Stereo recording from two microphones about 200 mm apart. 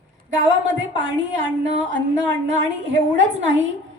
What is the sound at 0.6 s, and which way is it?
Speech, 70° right (ahead or behind).